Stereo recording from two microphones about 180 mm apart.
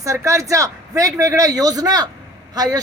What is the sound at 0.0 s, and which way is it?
A woman's voice, 15° right (ahead or behind).